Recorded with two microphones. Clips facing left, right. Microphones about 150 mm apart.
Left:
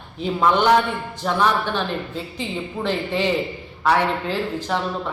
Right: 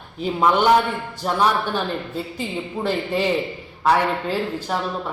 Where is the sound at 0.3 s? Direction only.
10° right (ahead or behind).